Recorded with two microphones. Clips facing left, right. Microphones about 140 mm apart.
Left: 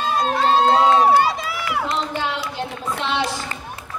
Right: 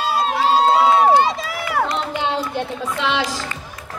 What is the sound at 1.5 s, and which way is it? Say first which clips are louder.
Run: right 3 dB; 45° right (ahead or behind).